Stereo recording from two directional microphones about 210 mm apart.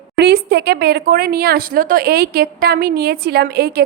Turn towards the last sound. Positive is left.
turn(degrees=-50)  # may be behind; listen again after turning